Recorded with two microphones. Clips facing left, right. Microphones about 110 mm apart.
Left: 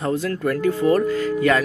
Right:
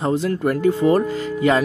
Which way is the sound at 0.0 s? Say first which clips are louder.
Right 2 dB; 25° right (ahead or behind).